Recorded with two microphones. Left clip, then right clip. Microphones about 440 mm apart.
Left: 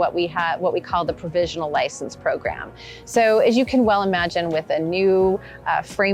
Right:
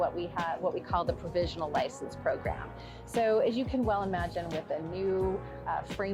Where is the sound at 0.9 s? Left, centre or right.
Left.